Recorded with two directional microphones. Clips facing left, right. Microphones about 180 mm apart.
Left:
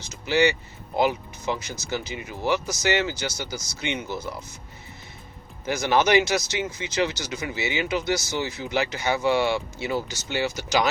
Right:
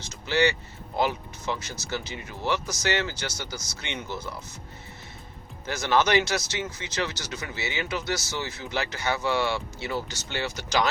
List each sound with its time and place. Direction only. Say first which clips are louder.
0.3 s speech: left 3 dB; 15° left (ahead or behind)
5.6 s speech: left 3 dB; 15° left (ahead or behind)